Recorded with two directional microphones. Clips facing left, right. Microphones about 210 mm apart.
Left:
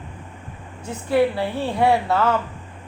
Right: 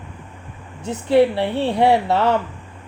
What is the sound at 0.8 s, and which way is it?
Speech, 25° right (ahead or behind).